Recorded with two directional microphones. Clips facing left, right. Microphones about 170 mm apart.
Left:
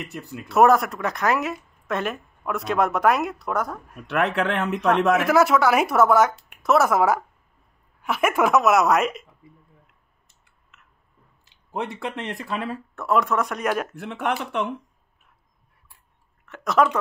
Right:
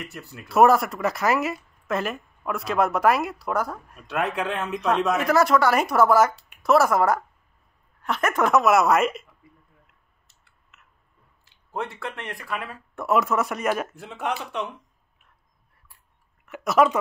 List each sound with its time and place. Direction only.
0.0 s speech: 20° left (ahead or behind)
0.5 s speech: centre (ahead or behind)
4.1 s speech: 70° left (ahead or behind)
5.2 s speech: 5° left (ahead or behind)
10.7 s a sound: centre (ahead or behind)
11.4 s speech: 20° left (ahead or behind)
12.9 s speech: 10° right (ahead or behind)
13.9 s speech: 65° left (ahead or behind)
16.4 s speech: 10° right (ahead or behind)